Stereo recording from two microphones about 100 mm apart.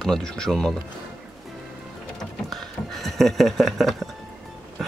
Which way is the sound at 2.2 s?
5° left (ahead or behind).